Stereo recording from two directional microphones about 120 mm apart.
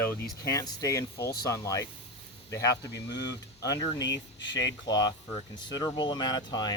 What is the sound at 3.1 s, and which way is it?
Speech, 30° left (ahead or behind).